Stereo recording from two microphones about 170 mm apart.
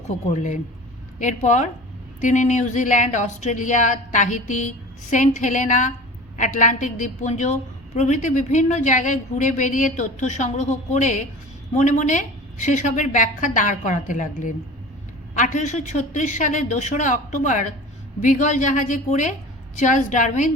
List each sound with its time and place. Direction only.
0.3 s a woman's voice: 45° left (ahead or behind)